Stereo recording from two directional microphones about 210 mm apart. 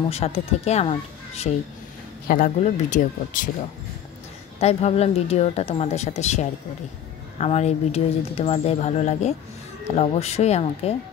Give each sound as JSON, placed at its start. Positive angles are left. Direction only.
{"t": 0.1, "sound": "a woman's voice", "side_deg": 30}
{"t": 2.2, "sound": "speech", "side_deg": 40}
{"t": 4.6, "sound": "a woman's voice", "side_deg": 30}